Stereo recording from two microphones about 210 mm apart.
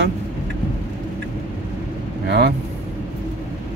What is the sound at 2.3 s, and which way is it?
Speech, 50° right (ahead or behind).